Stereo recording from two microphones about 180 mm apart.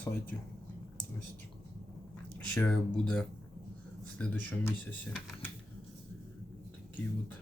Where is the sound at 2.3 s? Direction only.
10° left (ahead or behind).